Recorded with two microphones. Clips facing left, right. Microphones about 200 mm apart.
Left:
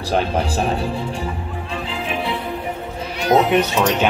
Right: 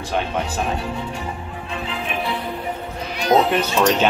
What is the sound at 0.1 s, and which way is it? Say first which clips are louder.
Speech: left 4 dB; 35° left (ahead or behind).